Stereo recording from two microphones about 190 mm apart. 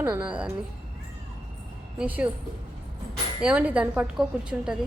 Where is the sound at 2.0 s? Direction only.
5° right (ahead or behind).